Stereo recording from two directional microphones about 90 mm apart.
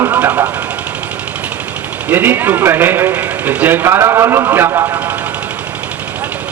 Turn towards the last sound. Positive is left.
turn(degrees=-30)  # may be behind; listen again after turning